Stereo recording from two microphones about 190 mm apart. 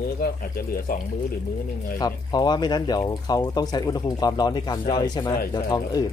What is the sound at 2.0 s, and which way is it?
Speech, 20° left (ahead or behind).